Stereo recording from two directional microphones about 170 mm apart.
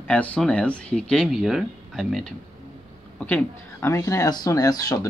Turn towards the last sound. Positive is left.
turn(degrees=20)  # may be behind; listen again after turning